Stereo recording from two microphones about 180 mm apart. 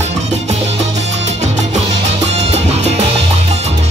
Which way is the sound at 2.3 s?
35° right (ahead or behind).